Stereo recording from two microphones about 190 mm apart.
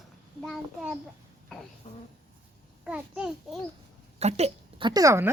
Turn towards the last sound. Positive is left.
turn(degrees=-15)  # may be behind; listen again after turning